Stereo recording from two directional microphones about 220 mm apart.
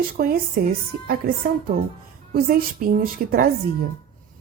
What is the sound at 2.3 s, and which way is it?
Speech, 40° right (ahead or behind).